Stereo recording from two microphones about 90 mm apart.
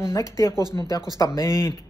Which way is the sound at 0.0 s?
35° left (ahead or behind).